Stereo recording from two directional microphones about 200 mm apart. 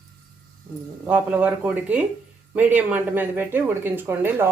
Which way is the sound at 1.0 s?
5° right (ahead or behind).